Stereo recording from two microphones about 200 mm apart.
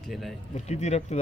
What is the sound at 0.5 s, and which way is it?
Speech, 35° left (ahead or behind).